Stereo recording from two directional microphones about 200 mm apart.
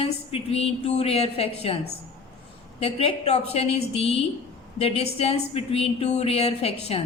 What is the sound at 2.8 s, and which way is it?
A woman's voice, 30° left (ahead or behind).